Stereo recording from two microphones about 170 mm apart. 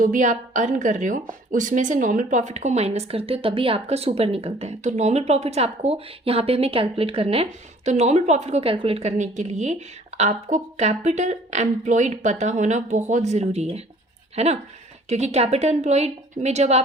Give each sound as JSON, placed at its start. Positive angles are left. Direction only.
{"t": 0.0, "sound": "a woman's voice", "side_deg": -50}